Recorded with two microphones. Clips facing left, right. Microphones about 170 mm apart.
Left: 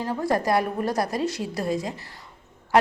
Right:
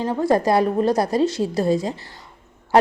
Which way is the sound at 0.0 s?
25° right (ahead or behind).